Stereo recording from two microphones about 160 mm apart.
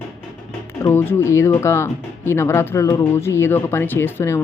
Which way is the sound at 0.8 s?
15° left (ahead or behind).